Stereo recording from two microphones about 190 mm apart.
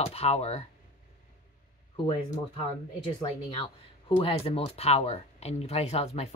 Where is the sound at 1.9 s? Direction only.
30° left (ahead or behind).